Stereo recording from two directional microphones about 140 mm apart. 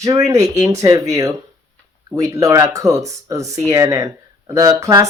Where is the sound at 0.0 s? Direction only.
25° right (ahead or behind).